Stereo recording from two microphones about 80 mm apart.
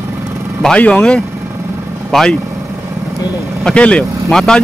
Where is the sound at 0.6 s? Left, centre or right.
Centre.